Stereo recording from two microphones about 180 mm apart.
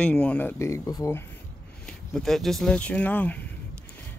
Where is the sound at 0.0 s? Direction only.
5° left (ahead or behind).